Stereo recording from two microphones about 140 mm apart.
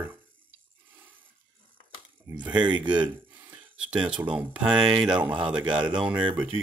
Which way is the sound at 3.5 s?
5° right (ahead or behind).